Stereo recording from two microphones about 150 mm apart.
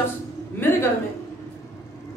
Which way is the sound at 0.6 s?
15° left (ahead or behind).